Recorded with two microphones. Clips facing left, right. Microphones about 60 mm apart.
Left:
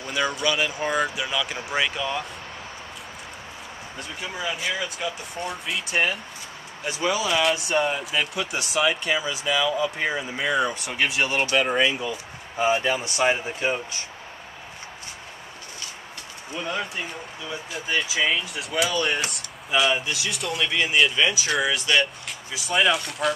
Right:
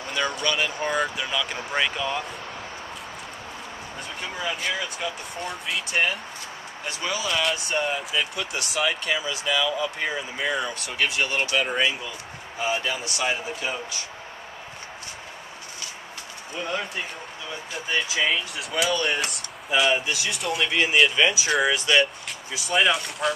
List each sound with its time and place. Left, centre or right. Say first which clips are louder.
0.1 s speech: left 2 dB; centre
4.2 s speech: even; centre
6.9 s speech: left 4 dB; centre
12.5 s speech: left 5 dB; left
16.5 s speech: even; centre